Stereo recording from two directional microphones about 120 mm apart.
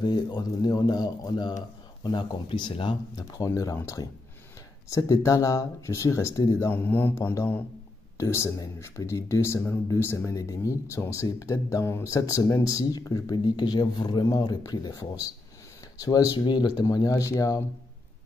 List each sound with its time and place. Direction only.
0.0 s speech: 35° left (ahead or behind)
6.7 s speech: 15° left (ahead or behind)